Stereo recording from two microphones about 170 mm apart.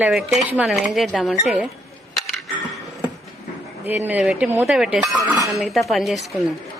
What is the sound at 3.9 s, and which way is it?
A woman's voice, 10° right (ahead or behind).